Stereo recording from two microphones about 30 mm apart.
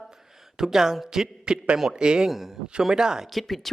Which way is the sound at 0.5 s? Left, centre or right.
Centre.